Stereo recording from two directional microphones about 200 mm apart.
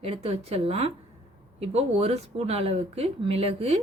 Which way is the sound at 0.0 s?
30° right (ahead or behind).